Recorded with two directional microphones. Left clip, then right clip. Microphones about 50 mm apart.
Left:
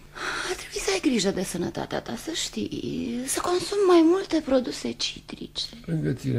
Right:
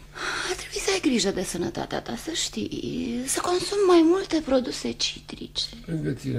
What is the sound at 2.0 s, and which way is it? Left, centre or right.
Speech, centre.